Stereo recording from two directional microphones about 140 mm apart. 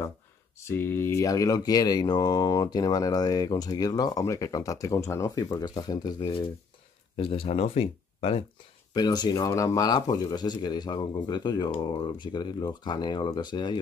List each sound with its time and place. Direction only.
0.6 s speech: 15° left (ahead or behind)
7.2 s speech: 40° left (ahead or behind)
8.9 s speech: 30° left (ahead or behind)